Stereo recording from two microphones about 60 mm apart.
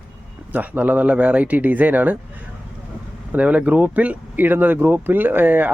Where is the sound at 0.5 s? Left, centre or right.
Right.